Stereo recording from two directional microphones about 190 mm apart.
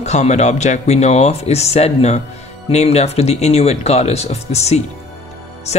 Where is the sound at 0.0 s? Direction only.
35° left (ahead or behind).